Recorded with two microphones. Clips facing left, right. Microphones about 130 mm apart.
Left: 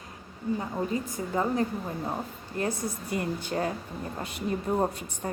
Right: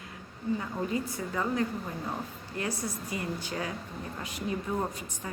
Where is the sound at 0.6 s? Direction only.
30° left (ahead or behind).